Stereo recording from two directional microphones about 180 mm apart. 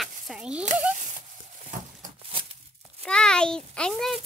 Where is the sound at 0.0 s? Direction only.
5° right (ahead or behind).